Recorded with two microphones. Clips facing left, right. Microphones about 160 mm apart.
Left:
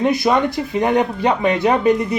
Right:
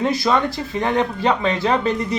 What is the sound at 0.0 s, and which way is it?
Speech, 15° left (ahead or behind).